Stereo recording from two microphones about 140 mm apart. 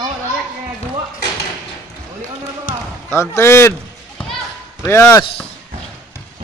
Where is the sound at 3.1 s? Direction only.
20° left (ahead or behind).